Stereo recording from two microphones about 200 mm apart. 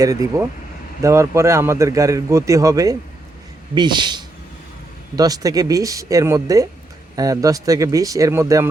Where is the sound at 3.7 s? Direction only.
20° right (ahead or behind).